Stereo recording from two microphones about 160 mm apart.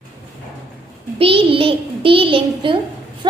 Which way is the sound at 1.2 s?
35° right (ahead or behind).